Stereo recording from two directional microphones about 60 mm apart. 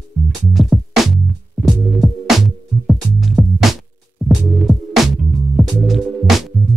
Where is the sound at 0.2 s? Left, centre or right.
Centre.